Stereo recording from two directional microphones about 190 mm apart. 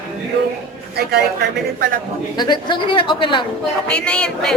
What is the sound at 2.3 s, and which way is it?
Speech, 25° left (ahead or behind).